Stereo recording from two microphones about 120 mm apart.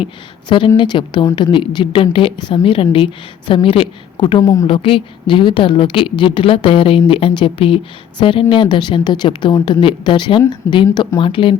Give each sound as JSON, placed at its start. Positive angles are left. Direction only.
{"t": 0.0, "sound": "speech", "side_deg": 45}
{"t": 4.6, "sound": "speech", "side_deg": 50}